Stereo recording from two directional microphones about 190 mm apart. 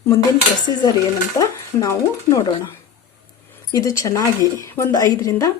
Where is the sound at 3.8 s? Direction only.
15° left (ahead or behind).